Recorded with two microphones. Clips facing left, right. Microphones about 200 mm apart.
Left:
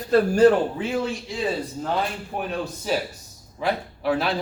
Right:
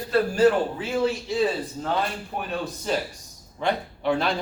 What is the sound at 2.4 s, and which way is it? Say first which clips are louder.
Speech: left 2 dB; 5° left (ahead or behind).